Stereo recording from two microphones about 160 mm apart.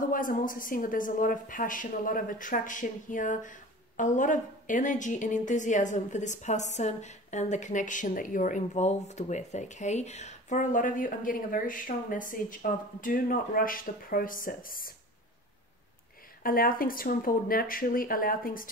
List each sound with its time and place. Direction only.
0.1 s a woman's voice: 55° left (ahead or behind)
16.4 s a woman's voice: 65° left (ahead or behind)